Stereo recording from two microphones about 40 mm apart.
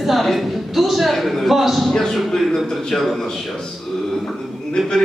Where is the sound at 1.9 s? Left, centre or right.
Centre.